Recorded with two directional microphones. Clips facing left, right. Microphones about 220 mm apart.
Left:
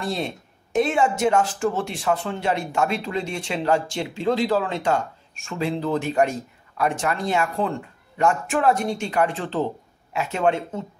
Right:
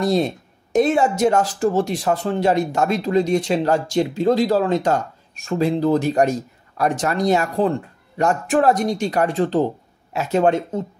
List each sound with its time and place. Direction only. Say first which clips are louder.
0.0 s speech: right 8 dB; 40° right (ahead or behind)